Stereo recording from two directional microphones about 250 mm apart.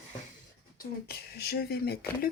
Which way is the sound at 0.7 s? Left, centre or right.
Left.